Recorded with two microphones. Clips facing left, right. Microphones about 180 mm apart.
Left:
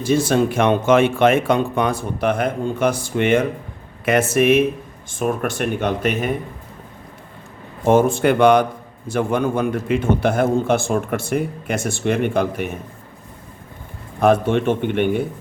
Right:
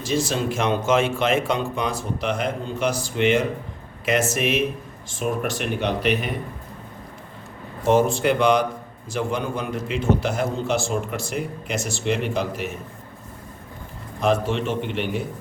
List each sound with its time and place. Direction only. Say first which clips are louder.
0.0 s a man's voice: left 7 dB; 55° left (ahead or behind)
7.9 s a man's voice: left 4 dB; 50° left (ahead or behind)
14.2 s speech: left 6 dB; 55° left (ahead or behind)